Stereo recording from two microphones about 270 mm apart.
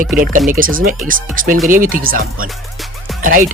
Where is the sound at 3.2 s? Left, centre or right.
Right.